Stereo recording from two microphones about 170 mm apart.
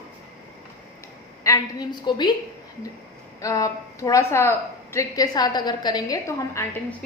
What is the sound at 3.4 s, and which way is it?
A woman's voice, 20° left (ahead or behind).